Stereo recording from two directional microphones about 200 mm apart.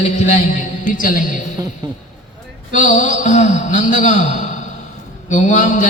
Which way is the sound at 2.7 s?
40° left (ahead or behind).